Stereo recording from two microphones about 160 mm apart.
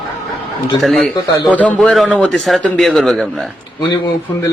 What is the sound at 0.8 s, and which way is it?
Speech, centre (ahead or behind).